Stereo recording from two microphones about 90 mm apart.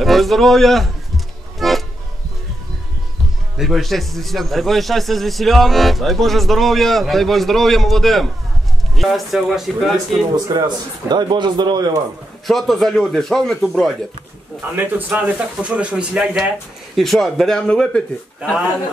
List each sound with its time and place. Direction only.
0.0 s music: centre (ahead or behind)
3.5 s a man's voice: centre (ahead or behind)
10.5 s a man's voice: 45° right (ahead or behind)
12.4 s a man's voice: 5° left (ahead or behind)
14.6 s a man's voice: 20° right (ahead or behind); by 18.0 s 10° left (ahead or behind)